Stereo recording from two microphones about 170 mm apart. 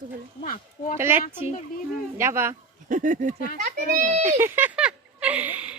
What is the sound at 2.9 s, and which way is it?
Speech, 50° right (ahead or behind).